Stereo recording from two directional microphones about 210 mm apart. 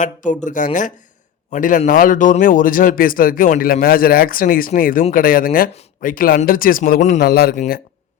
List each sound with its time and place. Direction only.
0.0 s a man's voice: 35° left (ahead or behind)